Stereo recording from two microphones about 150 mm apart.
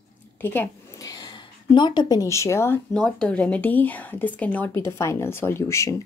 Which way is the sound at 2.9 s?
5° left (ahead or behind).